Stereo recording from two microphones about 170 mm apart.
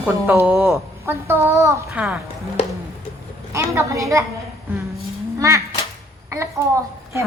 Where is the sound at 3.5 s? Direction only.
15° right (ahead or behind).